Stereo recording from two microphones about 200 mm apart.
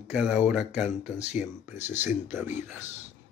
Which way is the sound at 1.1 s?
35° left (ahead or behind).